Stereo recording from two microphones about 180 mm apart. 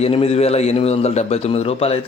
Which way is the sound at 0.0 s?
35° left (ahead or behind).